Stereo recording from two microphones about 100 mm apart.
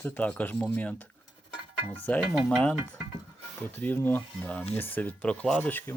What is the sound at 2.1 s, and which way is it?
Speech, 15° left (ahead or behind).